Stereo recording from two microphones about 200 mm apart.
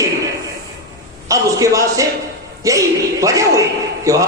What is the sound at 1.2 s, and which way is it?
A man's voice, 15° right (ahead or behind).